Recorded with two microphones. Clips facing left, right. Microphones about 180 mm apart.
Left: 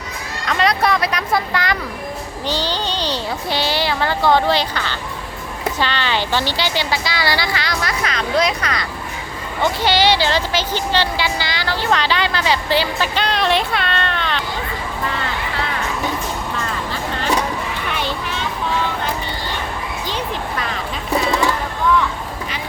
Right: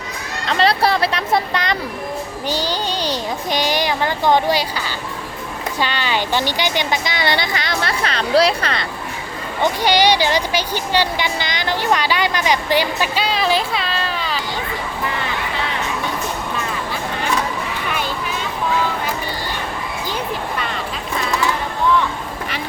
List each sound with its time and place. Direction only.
0.4 s speech: 30° right (ahead or behind)
2.5 s speech: 10° right (ahead or behind); by 8.9 s 30° right (ahead or behind)
9.8 s speech: 15° right (ahead or behind)
20.6 s music: centre (ahead or behind)